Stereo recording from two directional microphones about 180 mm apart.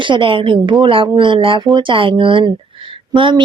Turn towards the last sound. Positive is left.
turn(degrees=-30)  # may be behind; listen again after turning